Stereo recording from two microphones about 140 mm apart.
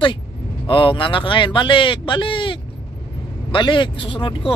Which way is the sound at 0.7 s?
40° left (ahead or behind).